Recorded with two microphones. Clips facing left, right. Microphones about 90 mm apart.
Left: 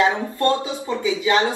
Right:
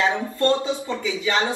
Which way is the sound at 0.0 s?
25° left (ahead or behind).